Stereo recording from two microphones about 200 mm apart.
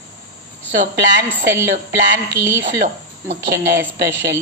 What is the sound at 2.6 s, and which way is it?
A woman's voice, 55° right (ahead or behind).